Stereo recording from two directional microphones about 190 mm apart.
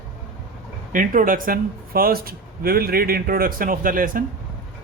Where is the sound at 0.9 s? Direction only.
45° right (ahead or behind).